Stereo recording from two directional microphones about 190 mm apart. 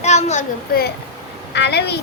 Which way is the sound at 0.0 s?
35° left (ahead or behind).